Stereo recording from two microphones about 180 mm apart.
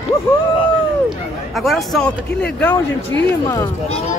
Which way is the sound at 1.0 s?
Centre (ahead or behind).